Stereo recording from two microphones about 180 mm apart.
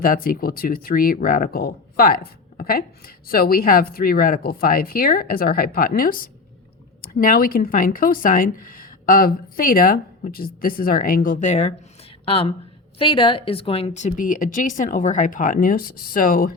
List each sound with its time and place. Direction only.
0.0 s speech: 50° left (ahead or behind)